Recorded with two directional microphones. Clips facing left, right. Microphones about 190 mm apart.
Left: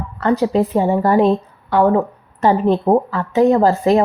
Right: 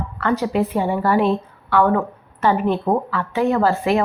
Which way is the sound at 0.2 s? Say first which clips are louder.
Left 4 dB; 35° left (ahead or behind).